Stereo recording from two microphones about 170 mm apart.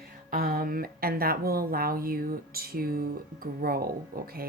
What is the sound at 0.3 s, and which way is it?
Speech, 55° right (ahead or behind).